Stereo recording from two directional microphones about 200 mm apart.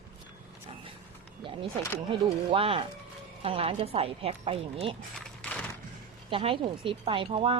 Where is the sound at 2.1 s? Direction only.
25° right (ahead or behind).